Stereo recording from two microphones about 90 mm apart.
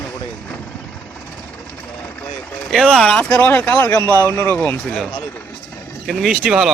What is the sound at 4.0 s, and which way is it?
Speech, 35° right (ahead or behind).